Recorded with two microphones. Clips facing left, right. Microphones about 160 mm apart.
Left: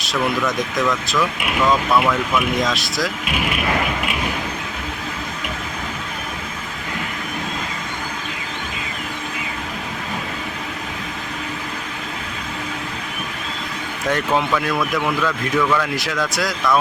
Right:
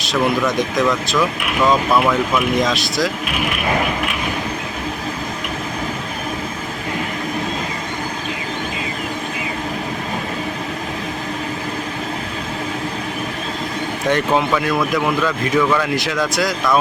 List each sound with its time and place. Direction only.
0.0 s speech: centre (ahead or behind)
1.6 s speech: 25° right (ahead or behind)
2.6 s speech: centre (ahead or behind)
14.1 s speech: 5° right (ahead or behind)